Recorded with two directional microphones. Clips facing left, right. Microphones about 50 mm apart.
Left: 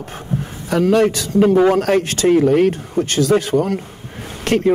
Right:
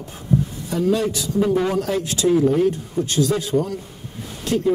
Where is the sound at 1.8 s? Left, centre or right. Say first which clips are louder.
Left 6 dB; left.